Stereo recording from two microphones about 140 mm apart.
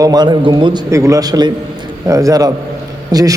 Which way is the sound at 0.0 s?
30° right (ahead or behind).